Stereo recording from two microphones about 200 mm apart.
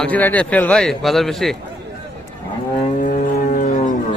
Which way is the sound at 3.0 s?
40° left (ahead or behind).